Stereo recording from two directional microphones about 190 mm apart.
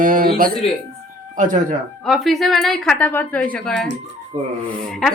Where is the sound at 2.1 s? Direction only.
Centre (ahead or behind).